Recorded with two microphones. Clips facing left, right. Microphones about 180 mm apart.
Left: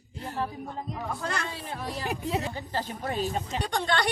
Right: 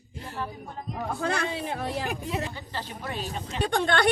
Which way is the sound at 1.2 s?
65° right (ahead or behind).